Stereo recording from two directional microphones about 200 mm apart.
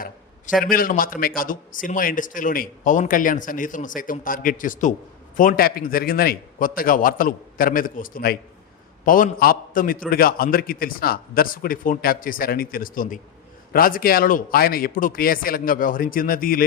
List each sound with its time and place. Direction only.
0.6 s a man's voice: 45° left (ahead or behind)